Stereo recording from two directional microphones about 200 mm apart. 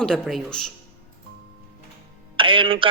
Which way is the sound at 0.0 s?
Centre (ahead or behind).